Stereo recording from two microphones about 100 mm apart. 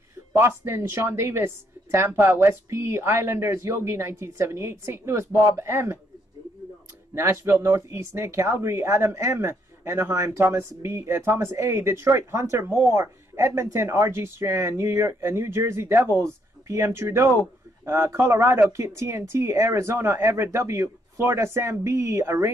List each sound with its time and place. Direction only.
0.3 s speech: 25° right (ahead or behind)
7.2 s speech: 25° right (ahead or behind)